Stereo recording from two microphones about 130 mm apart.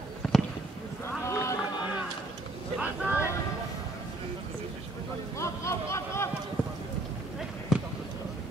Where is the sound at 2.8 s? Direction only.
10° right (ahead or behind).